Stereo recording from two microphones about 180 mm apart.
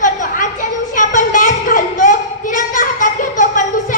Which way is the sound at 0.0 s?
45° left (ahead or behind).